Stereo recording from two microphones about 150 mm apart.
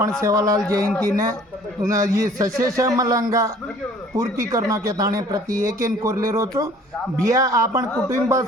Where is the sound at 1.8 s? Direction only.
20° right (ahead or behind).